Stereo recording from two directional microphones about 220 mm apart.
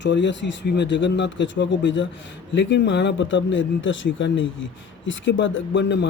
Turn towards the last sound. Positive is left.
turn(degrees=55)  # may be behind; listen again after turning